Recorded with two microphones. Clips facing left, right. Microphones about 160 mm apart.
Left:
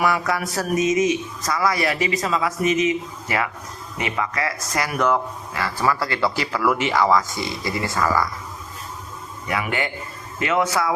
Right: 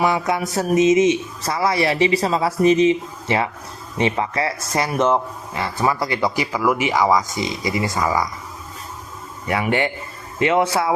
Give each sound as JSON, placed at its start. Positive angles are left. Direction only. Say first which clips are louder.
{"t": 0.0, "sound": "speech", "louder": "right 2 dB", "side_deg": -20}
{"t": 9.5, "sound": "speech", "louder": "right 5 dB", "side_deg": -30}